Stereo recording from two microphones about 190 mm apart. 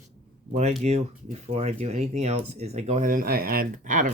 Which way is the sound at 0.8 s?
35° right (ahead or behind).